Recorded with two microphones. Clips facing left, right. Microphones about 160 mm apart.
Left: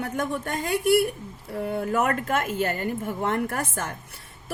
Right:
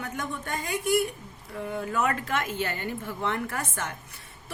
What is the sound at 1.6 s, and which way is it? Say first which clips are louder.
A woman's voice: left 4 dB; 55° left (ahead or behind).